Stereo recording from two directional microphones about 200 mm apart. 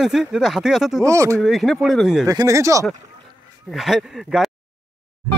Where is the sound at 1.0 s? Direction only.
15° right (ahead or behind).